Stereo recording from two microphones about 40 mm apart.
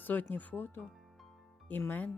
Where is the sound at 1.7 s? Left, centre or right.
Left.